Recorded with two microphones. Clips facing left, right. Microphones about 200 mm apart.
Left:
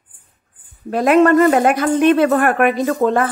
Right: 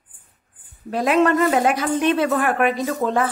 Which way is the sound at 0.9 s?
50° left (ahead or behind).